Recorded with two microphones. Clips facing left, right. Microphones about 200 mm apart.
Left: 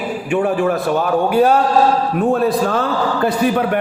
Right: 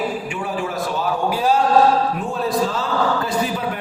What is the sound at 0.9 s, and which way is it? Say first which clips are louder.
A man's voice: left 7 dB; 60° left (ahead or behind).